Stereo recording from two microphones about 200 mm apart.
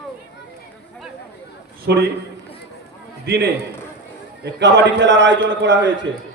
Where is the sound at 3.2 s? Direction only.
50° right (ahead or behind).